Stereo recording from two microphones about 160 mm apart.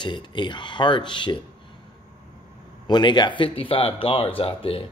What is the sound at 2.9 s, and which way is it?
Speech, 30° left (ahead or behind).